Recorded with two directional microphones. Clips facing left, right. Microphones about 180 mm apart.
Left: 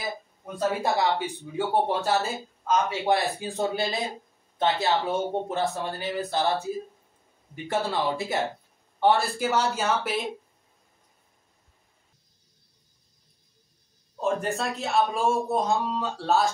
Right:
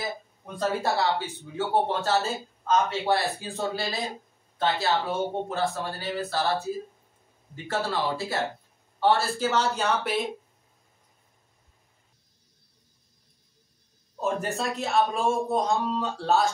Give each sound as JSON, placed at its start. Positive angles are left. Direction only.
{"t": 0.6, "sound": "speech", "side_deg": 15}
{"t": 9.7, "sound": "a man's voice", "side_deg": 0}
{"t": 14.2, "sound": "a man's voice", "side_deg": 0}